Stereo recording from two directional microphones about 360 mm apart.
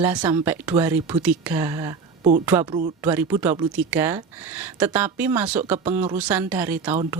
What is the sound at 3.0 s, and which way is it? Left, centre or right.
Speech, centre.